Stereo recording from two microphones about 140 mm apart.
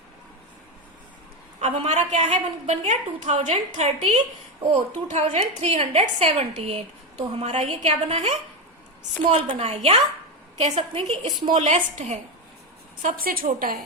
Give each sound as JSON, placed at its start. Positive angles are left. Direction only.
{"t": 1.6, "sound": "a woman's voice", "side_deg": -50}
{"t": 11.5, "sound": "a woman's voice", "side_deg": -60}
{"t": 13.0, "sound": "a woman's voice", "side_deg": -75}